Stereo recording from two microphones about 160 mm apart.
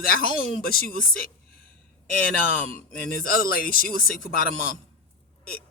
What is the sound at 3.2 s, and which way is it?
Speech, 65° left (ahead or behind).